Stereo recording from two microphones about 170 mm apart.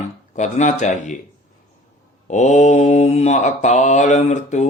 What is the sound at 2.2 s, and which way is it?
Mantra, 45° left (ahead or behind).